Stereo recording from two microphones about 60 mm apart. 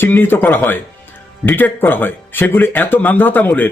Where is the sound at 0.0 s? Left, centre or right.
Left.